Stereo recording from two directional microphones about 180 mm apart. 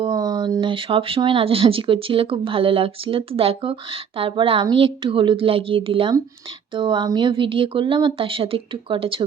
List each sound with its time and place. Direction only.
0.0 s speech: 20° right (ahead or behind)